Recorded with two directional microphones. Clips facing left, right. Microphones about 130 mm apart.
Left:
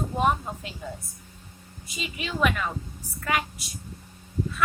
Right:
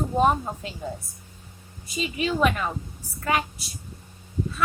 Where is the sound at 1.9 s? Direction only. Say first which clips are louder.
Right 8 dB; 40° right (ahead or behind).